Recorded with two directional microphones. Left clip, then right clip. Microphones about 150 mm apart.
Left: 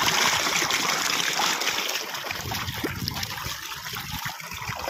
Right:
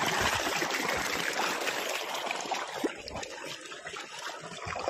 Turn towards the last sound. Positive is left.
turn(degrees=60)  # may be behind; listen again after turning